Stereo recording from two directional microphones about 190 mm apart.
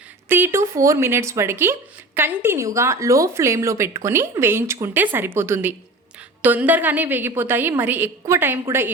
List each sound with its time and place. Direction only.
0.3 s speech: 10° right (ahead or behind)